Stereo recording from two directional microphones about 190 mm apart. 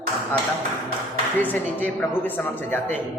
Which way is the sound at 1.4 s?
10° left (ahead or behind).